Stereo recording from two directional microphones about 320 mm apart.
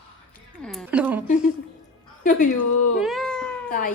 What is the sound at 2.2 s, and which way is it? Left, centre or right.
Speech, left.